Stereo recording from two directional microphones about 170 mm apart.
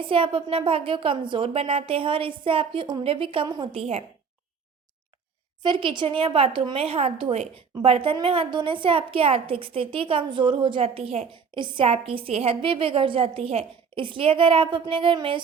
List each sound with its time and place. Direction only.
0.0 s a woman's voice: 30° right (ahead or behind)
5.6 s a woman's voice: 30° right (ahead or behind)